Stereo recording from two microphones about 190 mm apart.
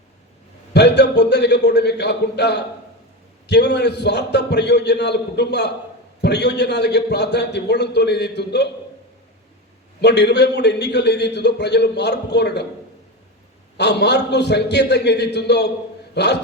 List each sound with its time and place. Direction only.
0.7 s a man's voice: 60° left (ahead or behind)
10.0 s a man's voice: 60° left (ahead or behind)
13.7 s a man's voice: 60° left (ahead or behind)